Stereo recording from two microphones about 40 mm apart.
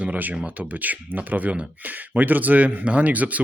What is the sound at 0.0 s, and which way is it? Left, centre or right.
Speech, right.